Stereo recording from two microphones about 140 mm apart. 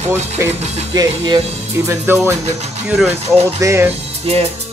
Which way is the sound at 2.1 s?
15° right (ahead or behind).